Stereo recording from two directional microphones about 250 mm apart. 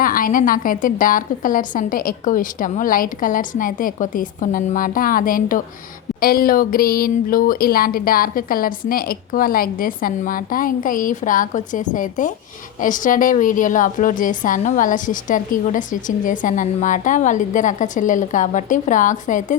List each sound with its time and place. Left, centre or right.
0.0 s a woman's voice: left